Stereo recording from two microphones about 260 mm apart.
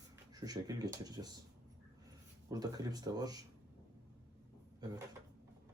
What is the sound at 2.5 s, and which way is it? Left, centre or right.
Speech, centre.